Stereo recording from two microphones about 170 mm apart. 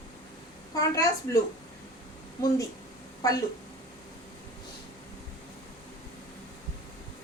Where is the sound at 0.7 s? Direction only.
20° left (ahead or behind).